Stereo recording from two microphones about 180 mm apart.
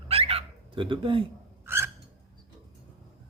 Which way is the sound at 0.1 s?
35° right (ahead or behind).